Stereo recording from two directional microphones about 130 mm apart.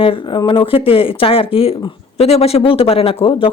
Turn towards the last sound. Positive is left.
turn(degrees=45)  # may be behind; listen again after turning